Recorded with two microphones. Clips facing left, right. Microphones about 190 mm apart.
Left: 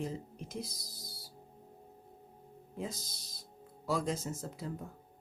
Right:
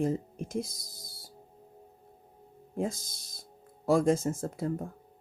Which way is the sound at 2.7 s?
50° right (ahead or behind).